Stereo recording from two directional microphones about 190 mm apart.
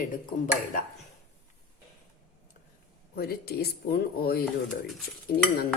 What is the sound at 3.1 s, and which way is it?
Speech, 55° left (ahead or behind).